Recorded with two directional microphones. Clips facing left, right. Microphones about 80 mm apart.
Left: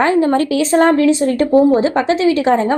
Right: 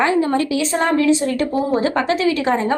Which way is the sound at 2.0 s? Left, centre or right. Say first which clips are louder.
Left 4 dB; left.